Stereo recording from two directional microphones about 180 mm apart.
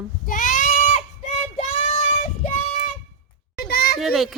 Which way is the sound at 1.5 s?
35° left (ahead or behind).